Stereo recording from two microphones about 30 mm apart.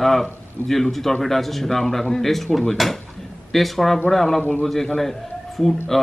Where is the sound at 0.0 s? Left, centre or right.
Centre.